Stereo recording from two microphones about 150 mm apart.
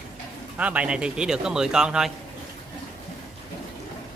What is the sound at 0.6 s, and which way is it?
A man's voice, 10° right (ahead or behind).